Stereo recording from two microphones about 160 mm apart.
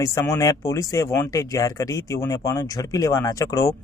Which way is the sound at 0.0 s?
20° left (ahead or behind).